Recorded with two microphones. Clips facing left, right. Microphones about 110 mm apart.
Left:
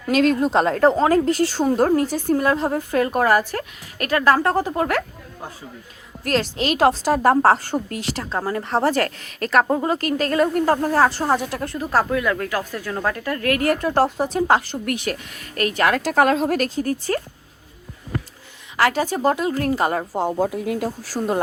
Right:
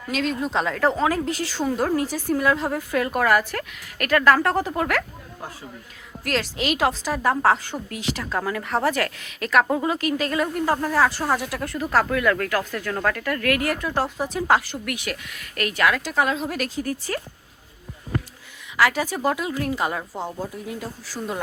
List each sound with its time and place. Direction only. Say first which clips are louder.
0.1 s a woman's voice: left 8 dB; 55° left (ahead or behind)
0.4 s speech: left 6 dB; 40° left (ahead or behind)
2.0 s a woman's voice: left 2 dB; 25° left (ahead or behind)
6.2 s speech: left 3 dB; 30° left (ahead or behind)
11.6 s a woman's voice: left 1 dB; 25° left (ahead or behind); by 16.6 s 45° left (ahead or behind)
16.6 s speech: left 5 dB; 30° left (ahead or behind)
18.8 s speech: left 2 dB; 35° left (ahead or behind)
20.4 s speech: left 9 dB; 75° left (ahead or behind)
21.0 s speech: left 7 dB; 40° left (ahead or behind)